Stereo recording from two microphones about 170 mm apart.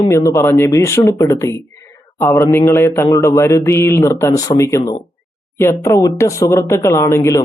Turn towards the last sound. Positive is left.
turn(degrees=15)  # may be behind; listen again after turning